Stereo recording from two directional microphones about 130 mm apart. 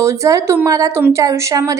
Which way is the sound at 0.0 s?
25° right (ahead or behind).